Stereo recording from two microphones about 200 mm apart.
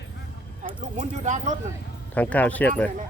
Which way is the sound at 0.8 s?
35° right (ahead or behind).